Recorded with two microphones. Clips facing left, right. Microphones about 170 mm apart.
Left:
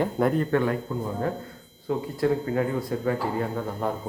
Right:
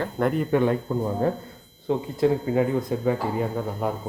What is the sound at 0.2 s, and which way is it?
Speech, centre (ahead or behind).